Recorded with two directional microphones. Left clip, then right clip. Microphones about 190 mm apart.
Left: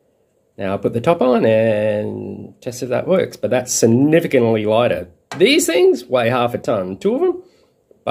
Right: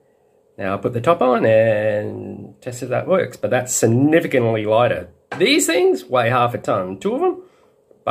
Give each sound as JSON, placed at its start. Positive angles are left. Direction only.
{"t": 0.6, "sound": "speech", "side_deg": 35}